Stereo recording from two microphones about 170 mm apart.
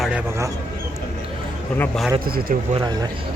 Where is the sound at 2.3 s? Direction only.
60° right (ahead or behind).